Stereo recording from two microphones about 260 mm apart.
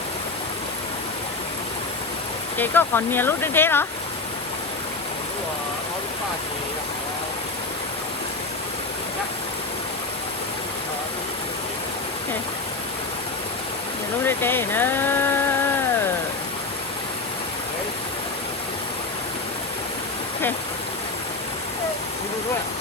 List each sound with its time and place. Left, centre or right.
2.6 s speech: centre
14.3 s speech: centre